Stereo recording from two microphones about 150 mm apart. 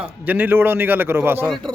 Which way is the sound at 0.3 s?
10° right (ahead or behind).